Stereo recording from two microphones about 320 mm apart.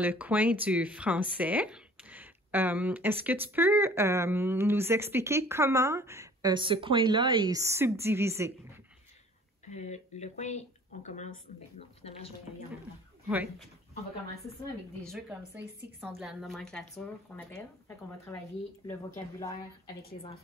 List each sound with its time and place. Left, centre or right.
0.0 s speech: centre
9.7 s speech: left
13.3 s a woman's voice: centre
15.0 s a woman's voice: centre
20.0 s speech: left